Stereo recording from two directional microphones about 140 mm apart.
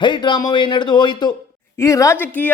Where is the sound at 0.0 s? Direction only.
35° left (ahead or behind).